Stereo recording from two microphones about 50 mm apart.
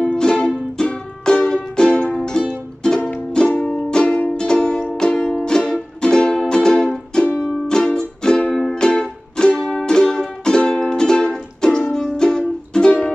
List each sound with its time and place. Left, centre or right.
0.0 s music: centre
4.0 s music: left
4.3 s music: centre